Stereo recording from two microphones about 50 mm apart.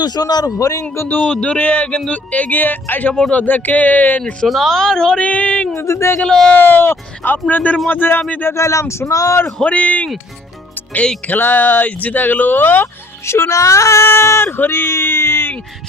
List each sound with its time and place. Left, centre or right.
0.6 s speech: left
1.3 s speech: left
4.4 s a woman's voice: centre
5.2 s music: left
5.8 s speech: left
6.1 s a woman's voice: centre
6.5 s speech: left
7.9 s speech: left
8.5 s speech: left
9.6 s speech: left
11.3 s speech: left
13.2 s speech: left
14.0 s speech: left